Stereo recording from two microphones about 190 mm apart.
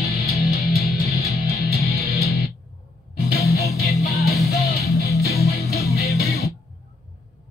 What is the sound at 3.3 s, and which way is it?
Music, 55° left (ahead or behind).